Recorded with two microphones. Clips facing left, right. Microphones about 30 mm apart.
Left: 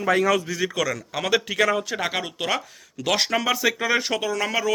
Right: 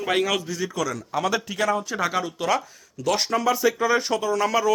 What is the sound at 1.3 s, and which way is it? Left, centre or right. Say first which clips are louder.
Speech: left 5 dB; left.